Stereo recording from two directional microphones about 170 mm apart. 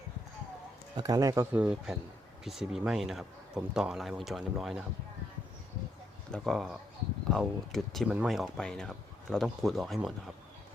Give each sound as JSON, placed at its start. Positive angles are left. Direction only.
{"t": 0.9, "sound": "speech", "side_deg": -20}
{"t": 1.5, "sound": "a man's voice", "side_deg": -5}
{"t": 6.3, "sound": "a man's voice", "side_deg": 0}